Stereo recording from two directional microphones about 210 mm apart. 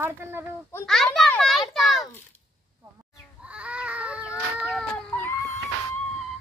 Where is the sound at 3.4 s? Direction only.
5° right (ahead or behind).